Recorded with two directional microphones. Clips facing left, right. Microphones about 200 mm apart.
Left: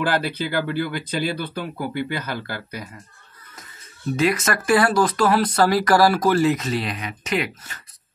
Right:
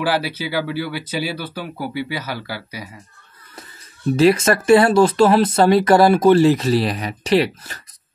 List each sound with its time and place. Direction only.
0.0 s speech: 5° right (ahead or behind)
4.2 s speech: 30° right (ahead or behind)